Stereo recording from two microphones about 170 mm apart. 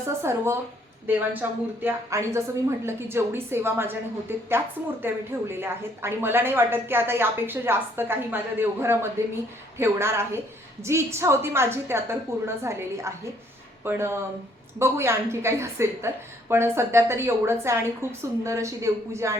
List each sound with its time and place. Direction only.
0.0 s a woman's voice: 15° right (ahead or behind)